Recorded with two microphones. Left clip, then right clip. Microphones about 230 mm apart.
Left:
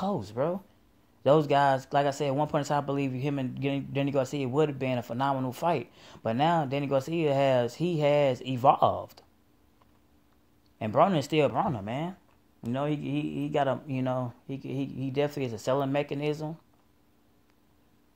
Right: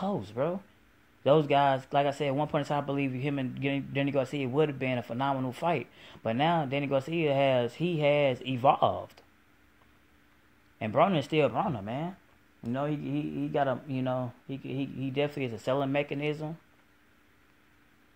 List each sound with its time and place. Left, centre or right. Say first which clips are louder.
0.0 s speech: left 1 dB; left
10.8 s speech: left 2 dB; left